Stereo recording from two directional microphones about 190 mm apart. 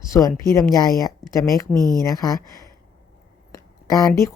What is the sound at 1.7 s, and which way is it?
Speech, 20° right (ahead or behind).